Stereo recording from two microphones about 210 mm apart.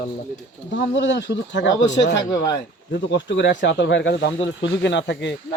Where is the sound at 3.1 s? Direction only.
60° left (ahead or behind).